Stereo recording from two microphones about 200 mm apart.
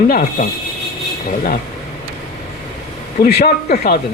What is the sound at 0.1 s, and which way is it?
Speech, 40° left (ahead or behind).